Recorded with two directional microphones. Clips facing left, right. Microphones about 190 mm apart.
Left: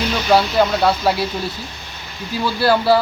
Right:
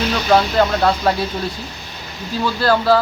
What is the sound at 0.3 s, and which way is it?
Speech, 5° left (ahead or behind).